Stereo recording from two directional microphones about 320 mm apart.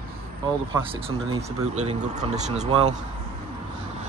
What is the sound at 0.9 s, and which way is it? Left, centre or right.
Speech, centre.